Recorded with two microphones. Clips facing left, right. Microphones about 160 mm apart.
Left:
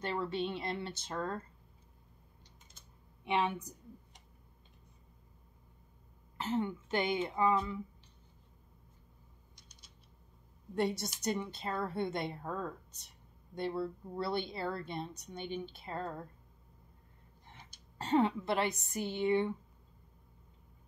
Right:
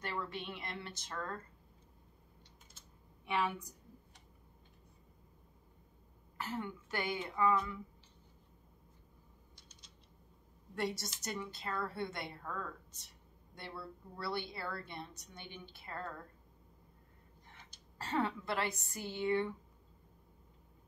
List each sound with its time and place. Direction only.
0.0 s a woman's voice: 25° left (ahead or behind)
3.3 s a sound: 20° left (ahead or behind)
6.3 s a woman's voice: 25° left (ahead or behind)
10.7 s a woman's voice: 20° left (ahead or behind)
17.9 s a woman's voice: 20° left (ahead or behind)